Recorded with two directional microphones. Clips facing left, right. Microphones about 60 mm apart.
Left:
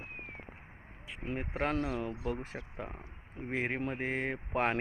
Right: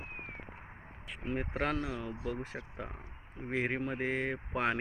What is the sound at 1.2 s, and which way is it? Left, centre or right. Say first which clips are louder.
Speech: even; left.